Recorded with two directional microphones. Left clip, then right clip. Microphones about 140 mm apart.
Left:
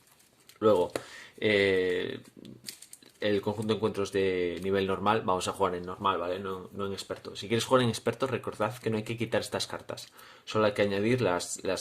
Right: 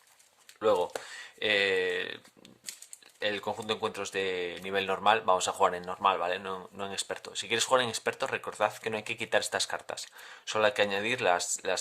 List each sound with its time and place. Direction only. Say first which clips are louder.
0.6 s speech: left 2 dB; 30° right (ahead or behind); by 7.4 s 45° right (ahead or behind)
7.4 s speech: left 1 dB; 30° right (ahead or behind)